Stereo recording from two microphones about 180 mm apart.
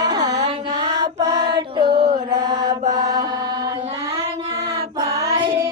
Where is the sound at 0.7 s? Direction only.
35° right (ahead or behind).